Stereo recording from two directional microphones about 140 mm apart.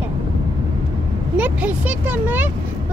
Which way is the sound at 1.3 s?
10° right (ahead or behind).